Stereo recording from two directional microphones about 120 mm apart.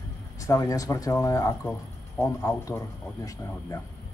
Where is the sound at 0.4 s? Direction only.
25° left (ahead or behind).